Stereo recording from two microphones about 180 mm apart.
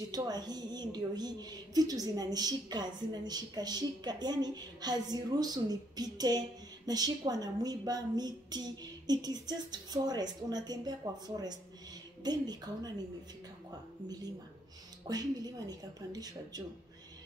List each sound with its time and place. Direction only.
0.1 s a woman's voice: 20° right (ahead or behind)
14.0 s a woman's voice: 20° right (ahead or behind)